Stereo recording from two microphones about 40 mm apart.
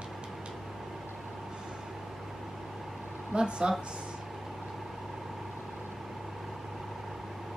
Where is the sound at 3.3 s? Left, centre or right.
Centre.